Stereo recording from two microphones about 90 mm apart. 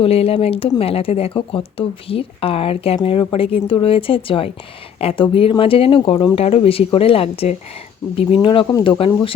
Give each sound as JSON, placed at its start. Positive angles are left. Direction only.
{"t": 0.0, "sound": "speech", "side_deg": 90}